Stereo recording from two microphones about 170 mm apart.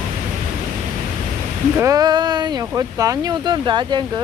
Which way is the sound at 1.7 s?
20° right (ahead or behind).